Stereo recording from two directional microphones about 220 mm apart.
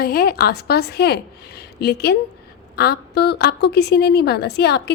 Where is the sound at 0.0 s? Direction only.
45° left (ahead or behind).